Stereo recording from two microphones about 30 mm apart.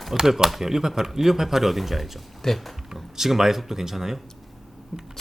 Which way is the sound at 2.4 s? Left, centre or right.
Centre.